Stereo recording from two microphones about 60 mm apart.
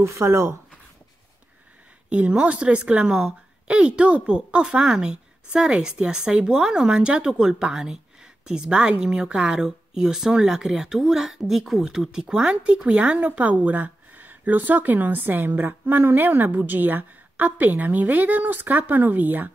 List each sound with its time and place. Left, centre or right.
0.2 s speech: right
2.0 s speech: right